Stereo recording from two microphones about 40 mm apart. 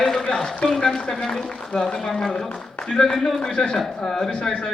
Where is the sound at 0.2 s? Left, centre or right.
Centre.